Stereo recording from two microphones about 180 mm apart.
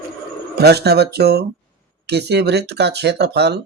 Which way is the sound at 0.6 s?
65° right (ahead or behind).